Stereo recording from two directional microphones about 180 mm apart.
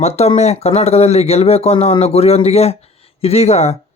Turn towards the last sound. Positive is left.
turn(degrees=35)  # may be behind; listen again after turning